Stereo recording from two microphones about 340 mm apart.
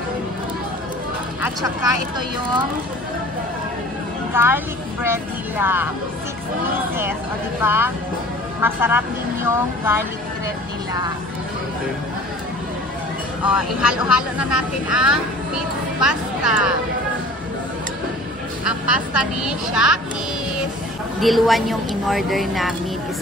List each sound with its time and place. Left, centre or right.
4.3 s speech: centre
7.6 s speech: centre
13.4 s a woman's voice: centre
18.7 s a woman's voice: centre
21.2 s a woman's voice: centre